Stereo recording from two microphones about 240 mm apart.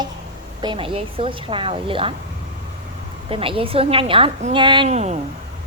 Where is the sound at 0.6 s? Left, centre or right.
Centre.